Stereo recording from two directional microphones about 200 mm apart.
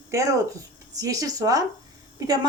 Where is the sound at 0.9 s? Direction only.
15° right (ahead or behind).